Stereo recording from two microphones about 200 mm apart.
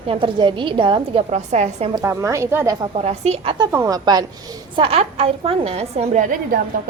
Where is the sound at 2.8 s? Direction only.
30° right (ahead or behind).